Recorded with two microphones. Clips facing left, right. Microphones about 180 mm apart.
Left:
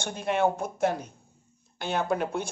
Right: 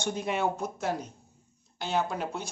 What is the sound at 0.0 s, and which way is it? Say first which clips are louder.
Speech: left 3 dB; 55° left (ahead or behind).